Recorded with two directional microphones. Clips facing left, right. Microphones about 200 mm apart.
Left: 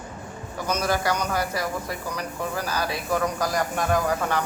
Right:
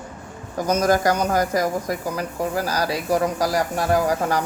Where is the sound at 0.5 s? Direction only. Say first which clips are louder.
Right 6 dB; 45° right (ahead or behind).